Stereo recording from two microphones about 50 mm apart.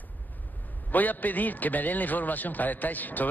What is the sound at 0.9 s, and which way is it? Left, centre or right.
A man's voice, left.